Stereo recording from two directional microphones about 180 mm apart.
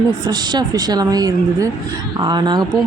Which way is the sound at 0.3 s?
20° right (ahead or behind).